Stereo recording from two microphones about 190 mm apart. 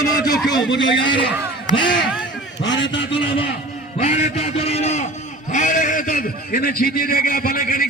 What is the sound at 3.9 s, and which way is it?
A man's voice, 40° left (ahead or behind).